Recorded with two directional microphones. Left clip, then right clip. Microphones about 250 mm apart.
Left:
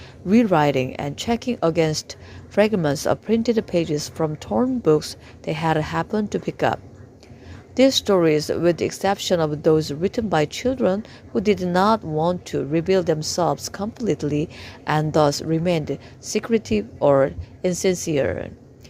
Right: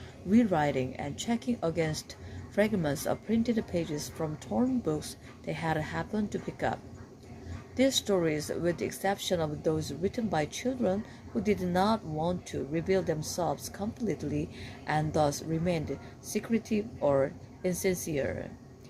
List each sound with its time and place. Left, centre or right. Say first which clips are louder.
0.3 s speech: left 10 dB; left
7.8 s speech: left 11 dB; left